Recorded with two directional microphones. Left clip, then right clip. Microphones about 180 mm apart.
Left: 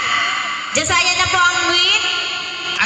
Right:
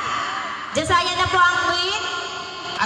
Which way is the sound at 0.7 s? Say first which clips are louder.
Left 3 dB; 15° left (ahead or behind).